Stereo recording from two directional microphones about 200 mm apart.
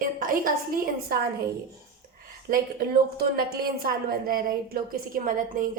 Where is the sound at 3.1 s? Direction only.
50° right (ahead or behind).